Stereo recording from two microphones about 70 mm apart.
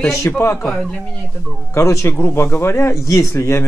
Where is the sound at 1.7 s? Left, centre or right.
Left.